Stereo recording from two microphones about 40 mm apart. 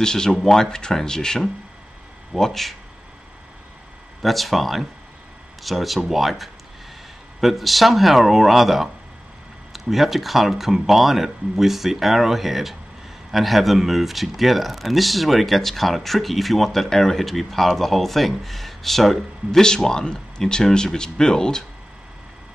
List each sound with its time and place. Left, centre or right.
0.0 s speech: centre
2.3 s speech: centre
4.2 s speech: centre